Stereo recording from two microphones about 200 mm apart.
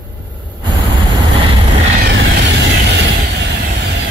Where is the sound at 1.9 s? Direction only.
60° right (ahead or behind).